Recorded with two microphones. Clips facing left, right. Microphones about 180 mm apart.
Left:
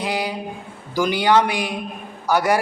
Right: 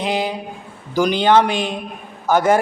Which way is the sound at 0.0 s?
20° right (ahead or behind).